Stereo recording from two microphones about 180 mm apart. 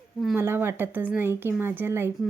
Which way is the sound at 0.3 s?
15° right (ahead or behind).